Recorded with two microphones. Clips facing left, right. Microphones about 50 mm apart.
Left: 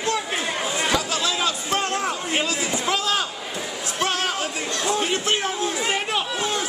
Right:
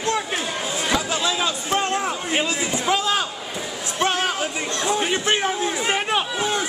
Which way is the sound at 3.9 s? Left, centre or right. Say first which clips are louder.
Right 3 dB; right.